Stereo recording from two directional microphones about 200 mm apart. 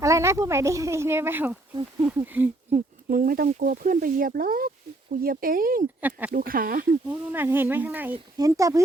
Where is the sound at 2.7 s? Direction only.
45° right (ahead or behind).